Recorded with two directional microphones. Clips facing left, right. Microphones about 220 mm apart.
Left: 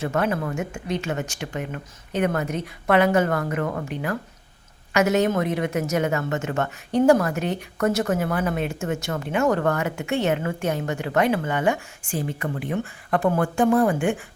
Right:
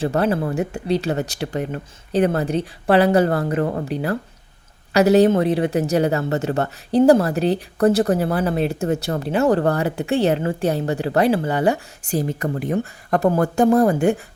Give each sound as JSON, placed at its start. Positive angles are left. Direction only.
{"t": 0.0, "sound": "a woman's voice", "side_deg": -35}